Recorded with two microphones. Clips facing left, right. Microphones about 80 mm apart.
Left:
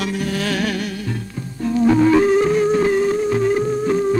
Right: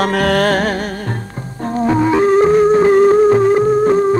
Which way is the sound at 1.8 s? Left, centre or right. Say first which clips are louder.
Left 1 dB; right.